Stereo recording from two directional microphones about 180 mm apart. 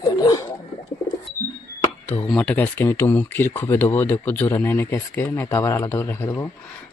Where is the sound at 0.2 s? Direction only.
20° left (ahead or behind).